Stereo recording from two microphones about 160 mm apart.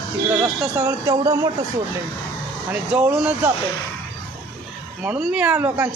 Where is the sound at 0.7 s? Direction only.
20° right (ahead or behind).